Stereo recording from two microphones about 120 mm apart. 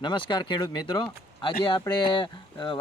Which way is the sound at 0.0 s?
40° left (ahead or behind).